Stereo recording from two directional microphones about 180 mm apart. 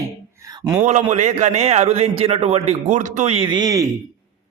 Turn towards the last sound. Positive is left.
turn(degrees=-20)  # may be behind; listen again after turning